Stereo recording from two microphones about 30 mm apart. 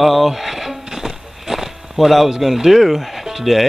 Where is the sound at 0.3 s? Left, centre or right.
Centre.